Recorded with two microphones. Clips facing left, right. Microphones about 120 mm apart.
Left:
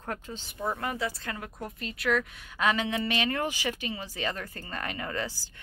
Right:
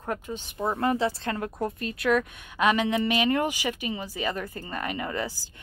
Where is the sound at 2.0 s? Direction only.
20° right (ahead or behind).